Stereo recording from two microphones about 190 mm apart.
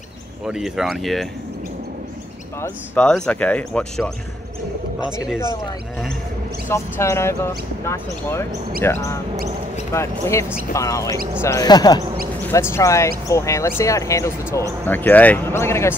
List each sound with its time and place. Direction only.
0.5 s speech: centre (ahead or behind)
3.0 s speech: 5° left (ahead or behind)
6.7 s speech: 15° left (ahead or behind)